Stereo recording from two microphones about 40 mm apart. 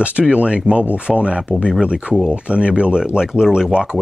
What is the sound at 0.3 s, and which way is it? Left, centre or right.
Speech, right.